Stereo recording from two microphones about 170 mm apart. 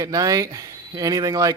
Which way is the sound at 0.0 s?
20° right (ahead or behind).